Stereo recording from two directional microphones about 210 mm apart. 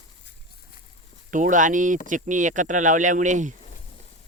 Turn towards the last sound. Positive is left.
turn(degrees=-35)  # may be behind; listen again after turning